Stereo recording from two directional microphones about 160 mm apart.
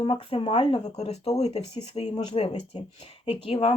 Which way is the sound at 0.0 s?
35° left (ahead or behind).